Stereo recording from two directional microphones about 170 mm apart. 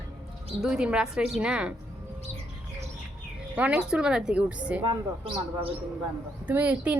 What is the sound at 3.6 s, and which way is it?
A woman's voice, 5° right (ahead or behind).